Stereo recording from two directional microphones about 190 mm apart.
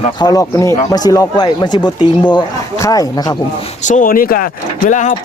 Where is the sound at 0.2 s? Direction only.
20° left (ahead or behind).